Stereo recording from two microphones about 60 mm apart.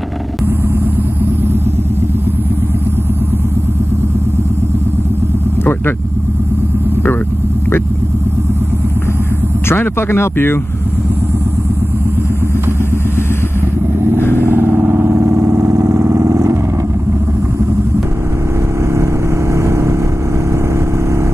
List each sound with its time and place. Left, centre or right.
5.6 s vehicle: left
9.7 s speech: left
14.2 s vehicle: left
14.5 s vehicle: right
19.5 s vehicle: right